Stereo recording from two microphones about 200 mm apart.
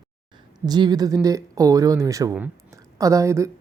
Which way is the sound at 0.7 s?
20° right (ahead or behind).